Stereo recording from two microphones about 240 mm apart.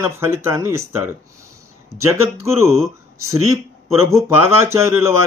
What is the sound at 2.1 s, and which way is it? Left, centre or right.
Speech, centre.